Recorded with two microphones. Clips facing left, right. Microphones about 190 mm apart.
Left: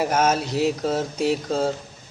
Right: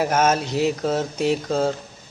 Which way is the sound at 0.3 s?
5° left (ahead or behind).